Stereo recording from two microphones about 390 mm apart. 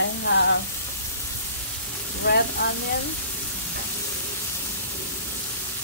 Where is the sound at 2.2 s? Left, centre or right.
Left.